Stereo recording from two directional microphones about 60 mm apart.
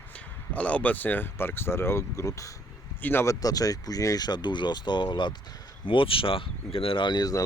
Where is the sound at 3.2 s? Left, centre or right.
Left.